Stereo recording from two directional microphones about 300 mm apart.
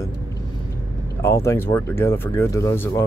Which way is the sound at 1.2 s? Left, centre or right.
Centre.